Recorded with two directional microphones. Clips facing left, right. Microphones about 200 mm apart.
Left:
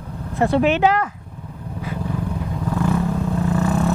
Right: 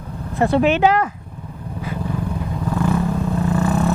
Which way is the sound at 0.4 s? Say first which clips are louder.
Right 1 dB; 15° right (ahead or behind).